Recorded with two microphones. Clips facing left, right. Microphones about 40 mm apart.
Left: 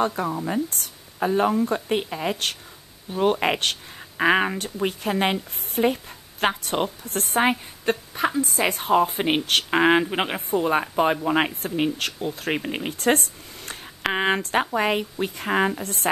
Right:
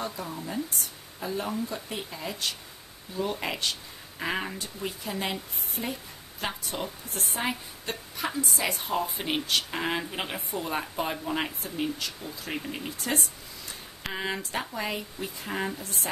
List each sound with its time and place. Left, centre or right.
0.0 s speech: left